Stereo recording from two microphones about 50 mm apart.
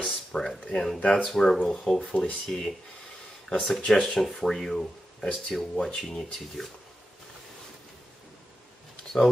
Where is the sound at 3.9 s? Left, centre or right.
Centre.